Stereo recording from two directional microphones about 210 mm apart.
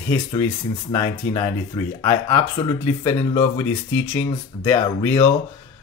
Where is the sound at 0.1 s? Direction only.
15° left (ahead or behind).